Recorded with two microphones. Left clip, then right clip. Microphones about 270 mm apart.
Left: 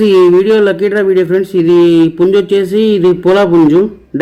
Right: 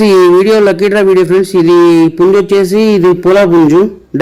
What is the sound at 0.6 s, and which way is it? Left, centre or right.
Speech, centre.